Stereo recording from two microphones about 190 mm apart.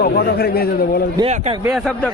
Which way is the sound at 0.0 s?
55° left (ahead or behind).